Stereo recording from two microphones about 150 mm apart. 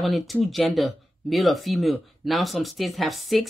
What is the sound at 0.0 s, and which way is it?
Speech, centre (ahead or behind).